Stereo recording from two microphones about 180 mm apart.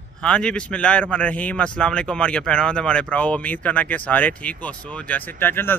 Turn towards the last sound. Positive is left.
turn(degrees=10)  # may be behind; listen again after turning